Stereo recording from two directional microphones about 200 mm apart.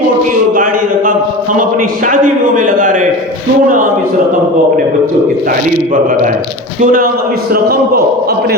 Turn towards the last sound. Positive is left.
turn(degrees=-50)  # may be behind; listen again after turning